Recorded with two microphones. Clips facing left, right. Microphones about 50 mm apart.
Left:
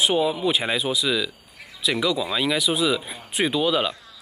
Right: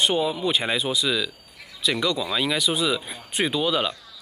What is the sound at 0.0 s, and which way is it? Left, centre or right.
Speech, centre.